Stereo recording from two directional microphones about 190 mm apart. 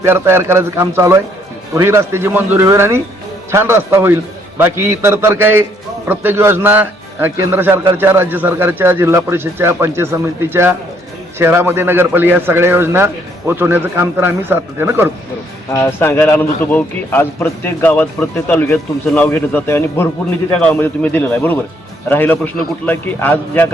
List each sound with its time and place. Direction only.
0.0 s a man's voice: 10° right (ahead or behind)
15.7 s a man's voice: 15° left (ahead or behind)
19.3 s a man's voice: 15° left (ahead or behind)